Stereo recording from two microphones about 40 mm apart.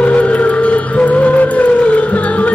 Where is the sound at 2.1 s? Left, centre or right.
Left.